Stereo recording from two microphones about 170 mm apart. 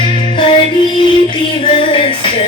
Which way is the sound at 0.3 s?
30° left (ahead or behind).